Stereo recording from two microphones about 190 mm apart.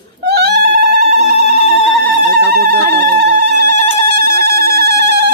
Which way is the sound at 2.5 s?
55° right (ahead or behind).